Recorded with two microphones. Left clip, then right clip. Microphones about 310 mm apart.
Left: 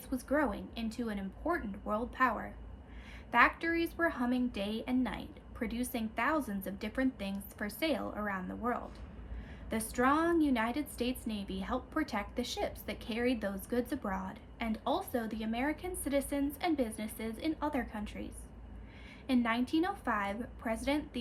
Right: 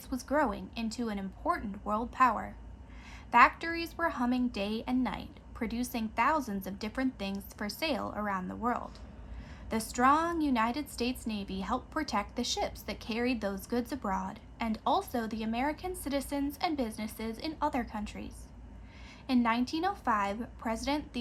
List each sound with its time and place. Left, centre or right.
0.1 s a woman's voice: centre
19.3 s a woman's voice: centre